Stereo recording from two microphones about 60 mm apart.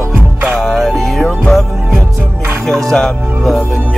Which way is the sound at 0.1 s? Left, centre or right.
Right.